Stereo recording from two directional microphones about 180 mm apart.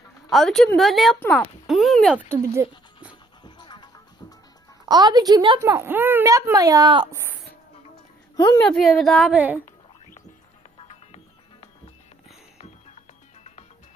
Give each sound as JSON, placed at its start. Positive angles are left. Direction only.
{"t": 0.3, "sound": "a woman's voice", "side_deg": 0}
{"t": 2.3, "sound": "a sound", "side_deg": -15}
{"t": 3.4, "sound": "music", "side_deg": 25}
{"t": 4.9, "sound": "a woman's voice", "side_deg": -20}
{"t": 8.4, "sound": "a woman's voice", "side_deg": 20}
{"t": 8.6, "sound": "a woman's voice", "side_deg": 0}
{"t": 10.8, "sound": "music", "side_deg": 35}